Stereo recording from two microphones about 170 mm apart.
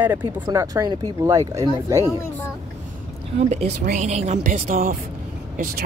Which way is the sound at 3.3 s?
40° right (ahead or behind).